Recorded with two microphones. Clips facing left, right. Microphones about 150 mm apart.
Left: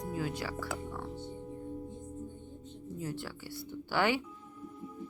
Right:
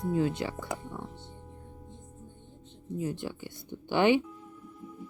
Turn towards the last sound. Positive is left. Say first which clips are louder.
# right 6 dB
turn(degrees=-20)  # may be behind; listen again after turning